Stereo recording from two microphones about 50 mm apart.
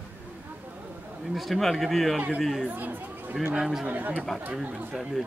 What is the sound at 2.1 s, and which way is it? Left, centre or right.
Speech, centre.